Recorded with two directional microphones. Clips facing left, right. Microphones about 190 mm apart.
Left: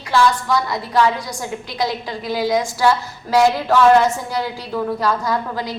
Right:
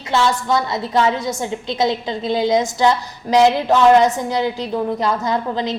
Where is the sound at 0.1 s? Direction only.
25° right (ahead or behind).